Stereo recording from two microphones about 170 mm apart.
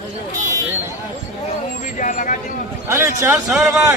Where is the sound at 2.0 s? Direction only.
50° left (ahead or behind).